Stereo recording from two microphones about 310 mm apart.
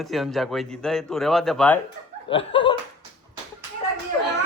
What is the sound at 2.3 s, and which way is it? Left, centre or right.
Speech, centre.